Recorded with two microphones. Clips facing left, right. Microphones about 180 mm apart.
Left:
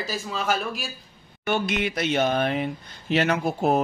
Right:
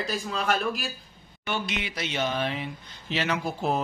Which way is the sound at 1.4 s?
50° left (ahead or behind).